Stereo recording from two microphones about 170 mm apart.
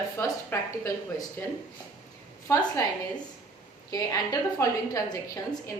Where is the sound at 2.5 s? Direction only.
20° left (ahead or behind).